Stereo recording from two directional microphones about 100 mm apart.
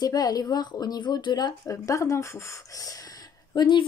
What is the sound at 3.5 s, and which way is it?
Speech, 50° left (ahead or behind).